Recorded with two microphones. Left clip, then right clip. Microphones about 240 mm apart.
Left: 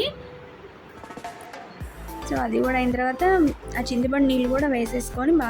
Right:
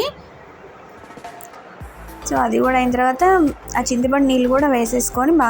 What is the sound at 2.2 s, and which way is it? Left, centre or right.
A woman's voice, centre.